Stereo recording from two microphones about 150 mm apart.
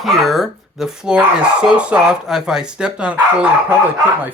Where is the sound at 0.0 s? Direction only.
Centre (ahead or behind).